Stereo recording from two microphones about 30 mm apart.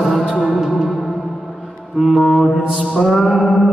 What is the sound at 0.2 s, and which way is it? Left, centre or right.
Music, centre.